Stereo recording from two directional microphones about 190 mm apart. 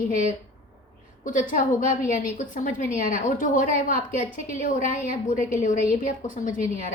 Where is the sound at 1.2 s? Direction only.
45° left (ahead or behind).